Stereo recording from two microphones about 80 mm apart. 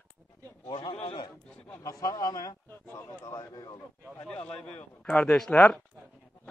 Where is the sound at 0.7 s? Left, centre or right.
Left.